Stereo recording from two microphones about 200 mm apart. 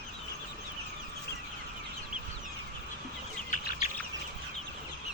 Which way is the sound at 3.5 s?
40° left (ahead or behind).